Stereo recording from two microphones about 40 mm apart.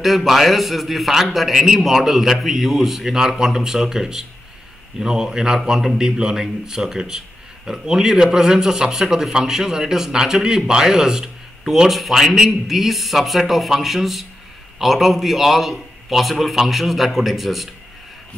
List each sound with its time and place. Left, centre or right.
0.0 s a man's voice: centre